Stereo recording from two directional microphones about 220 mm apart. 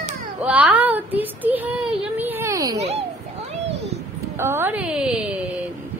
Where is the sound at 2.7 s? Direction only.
30° right (ahead or behind).